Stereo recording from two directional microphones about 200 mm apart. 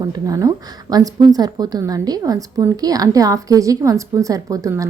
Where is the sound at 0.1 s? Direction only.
15° right (ahead or behind).